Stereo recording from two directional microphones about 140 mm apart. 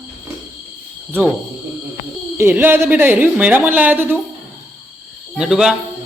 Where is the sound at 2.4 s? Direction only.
15° right (ahead or behind).